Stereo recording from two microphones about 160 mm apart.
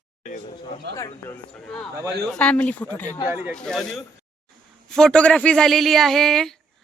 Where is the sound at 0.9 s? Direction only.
20° left (ahead or behind).